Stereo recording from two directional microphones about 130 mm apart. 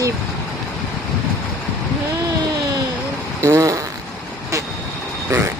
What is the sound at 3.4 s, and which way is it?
Fart, 25° right (ahead or behind).